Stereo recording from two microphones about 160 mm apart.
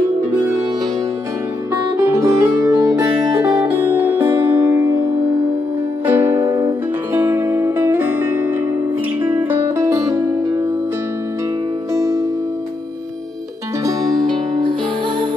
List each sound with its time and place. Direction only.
2.0 s music: 15° right (ahead or behind)
6.0 s music: 15° right (ahead or behind)
6.4 s music: 25° right (ahead or behind)
7.2 s music: 15° right (ahead or behind)
11.9 s music: 20° right (ahead or behind)
14.6 s music: 30° right (ahead or behind)